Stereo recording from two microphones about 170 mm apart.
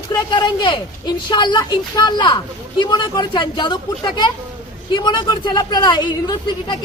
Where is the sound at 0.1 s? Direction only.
25° left (ahead or behind).